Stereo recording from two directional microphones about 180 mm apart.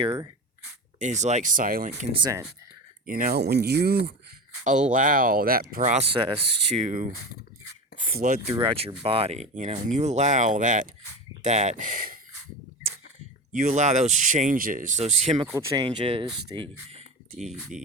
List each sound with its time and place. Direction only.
0.0 s speech: 25° right (ahead or behind)
0.9 s speech: 40° right (ahead or behind)
2.1 s speech: 25° right (ahead or behind)
3.1 s speech: 50° right (ahead or behind)
3.4 s speech: 65° right (ahead or behind)
4.6 s speech: 45° right (ahead or behind)
6.8 s speech: 45° right (ahead or behind)
8.6 s speech: 30° right (ahead or behind); by 12.2 s 50° right (ahead or behind)
13.5 s speech: 45° right (ahead or behind)
15.4 s speech: 15° right (ahead or behind); by 17.4 s 35° right (ahead or behind)
17.7 s music: 5° right (ahead or behind)